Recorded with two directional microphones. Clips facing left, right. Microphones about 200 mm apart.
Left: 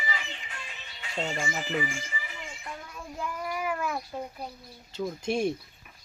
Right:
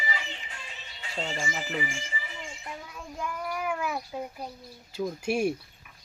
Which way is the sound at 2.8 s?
5° left (ahead or behind).